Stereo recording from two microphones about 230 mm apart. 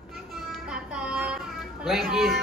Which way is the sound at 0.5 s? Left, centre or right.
Centre.